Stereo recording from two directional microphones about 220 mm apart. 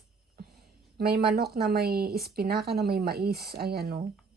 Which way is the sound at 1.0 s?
45° right (ahead or behind).